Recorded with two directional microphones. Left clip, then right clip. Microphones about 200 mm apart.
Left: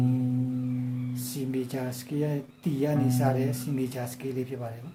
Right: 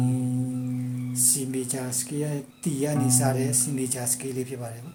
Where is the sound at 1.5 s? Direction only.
5° right (ahead or behind).